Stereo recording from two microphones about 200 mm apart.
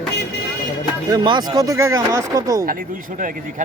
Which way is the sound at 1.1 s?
20° right (ahead or behind).